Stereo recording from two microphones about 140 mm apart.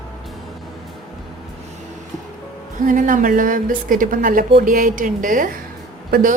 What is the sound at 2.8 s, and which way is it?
A woman's voice, 70° right (ahead or behind).